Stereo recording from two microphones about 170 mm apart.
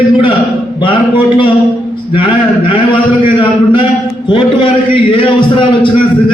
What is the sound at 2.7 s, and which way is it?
A man's voice, 30° left (ahead or behind).